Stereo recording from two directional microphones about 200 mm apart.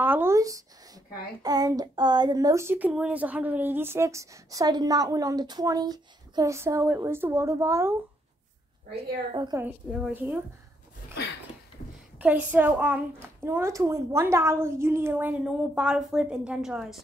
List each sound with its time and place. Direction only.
0.0 s speech: 10° right (ahead or behind)
8.9 s a woman's voice: 20° right (ahead or behind)
9.6 s speech: 5° right (ahead or behind)
12.2 s speech: 10° right (ahead or behind)